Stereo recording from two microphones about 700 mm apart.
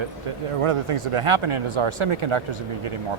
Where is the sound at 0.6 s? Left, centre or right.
Right.